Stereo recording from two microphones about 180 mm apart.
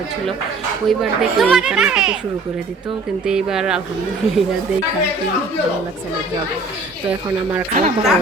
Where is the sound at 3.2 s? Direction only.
5° right (ahead or behind).